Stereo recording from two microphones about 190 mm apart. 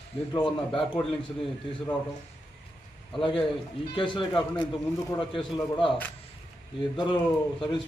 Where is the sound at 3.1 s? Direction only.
25° left (ahead or behind).